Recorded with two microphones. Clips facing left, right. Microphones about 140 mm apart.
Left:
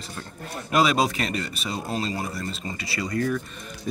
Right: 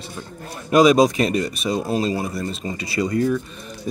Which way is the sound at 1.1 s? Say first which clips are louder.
Right 8 dB; 20° right (ahead or behind).